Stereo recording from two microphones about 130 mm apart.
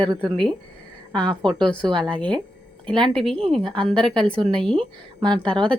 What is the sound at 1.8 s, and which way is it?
Speech, 35° right (ahead or behind).